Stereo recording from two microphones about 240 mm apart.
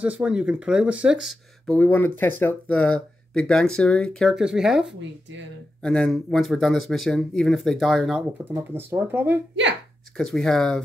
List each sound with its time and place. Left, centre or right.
0.0 s speech: centre
10.1 s speech: centre